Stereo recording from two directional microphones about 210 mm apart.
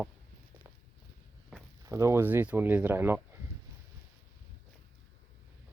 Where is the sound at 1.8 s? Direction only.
15° right (ahead or behind).